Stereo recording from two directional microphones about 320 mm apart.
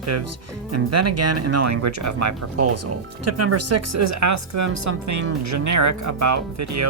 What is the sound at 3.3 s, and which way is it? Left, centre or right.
Speech, right.